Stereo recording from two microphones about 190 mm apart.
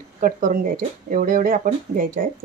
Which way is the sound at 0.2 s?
45° right (ahead or behind).